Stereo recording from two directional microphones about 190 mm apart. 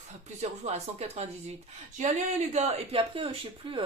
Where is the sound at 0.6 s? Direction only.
35° right (ahead or behind).